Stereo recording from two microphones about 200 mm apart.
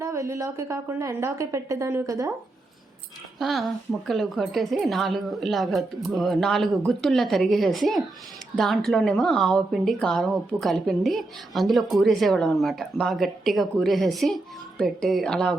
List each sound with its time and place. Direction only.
0.0 s a woman's voice: 15° right (ahead or behind)
3.3 s speech: centre (ahead or behind)